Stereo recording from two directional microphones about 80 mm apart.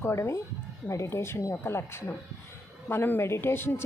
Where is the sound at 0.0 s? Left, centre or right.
Left.